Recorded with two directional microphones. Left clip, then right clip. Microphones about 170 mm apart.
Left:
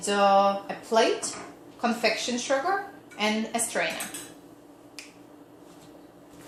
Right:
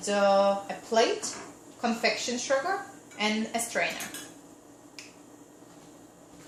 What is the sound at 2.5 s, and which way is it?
A woman's voice, 10° left (ahead or behind).